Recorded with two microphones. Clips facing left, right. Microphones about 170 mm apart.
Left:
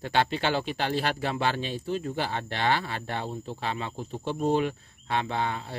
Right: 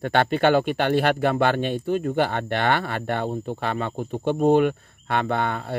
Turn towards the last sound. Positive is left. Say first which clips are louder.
# right 5 dB
turn(degrees=-60)  # may be behind; listen again after turning